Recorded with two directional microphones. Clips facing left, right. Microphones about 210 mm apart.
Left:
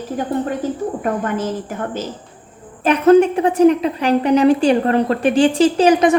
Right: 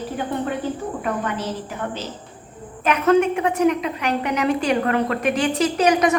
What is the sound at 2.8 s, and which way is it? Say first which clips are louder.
A woman's voice: left 6 dB; 35° left (ahead or behind).